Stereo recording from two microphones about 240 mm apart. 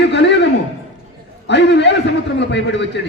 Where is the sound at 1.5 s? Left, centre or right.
Left.